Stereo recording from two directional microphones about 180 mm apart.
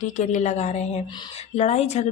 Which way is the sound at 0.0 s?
40° left (ahead or behind).